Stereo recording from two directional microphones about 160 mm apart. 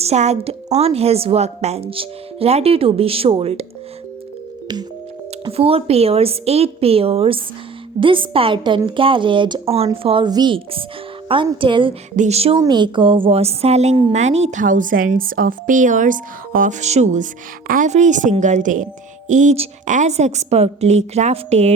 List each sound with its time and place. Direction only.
0.0 s speech: 45° right (ahead or behind)
5.5 s speech: 35° right (ahead or behind)
12.1 s speech: 45° right (ahead or behind)
12.5 s a woman's voice: 25° right (ahead or behind); by 21.7 s 45° right (ahead or behind)